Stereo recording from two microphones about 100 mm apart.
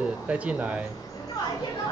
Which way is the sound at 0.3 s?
10° right (ahead or behind).